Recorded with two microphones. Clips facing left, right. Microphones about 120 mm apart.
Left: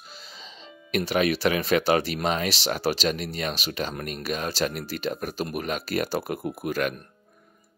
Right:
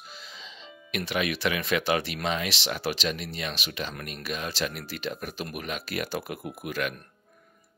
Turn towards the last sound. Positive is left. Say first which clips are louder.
# left 5 dB
turn(degrees=40)  # may be behind; listen again after turning